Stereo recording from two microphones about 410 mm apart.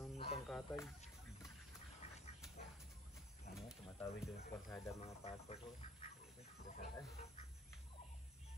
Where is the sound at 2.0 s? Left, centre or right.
Centre.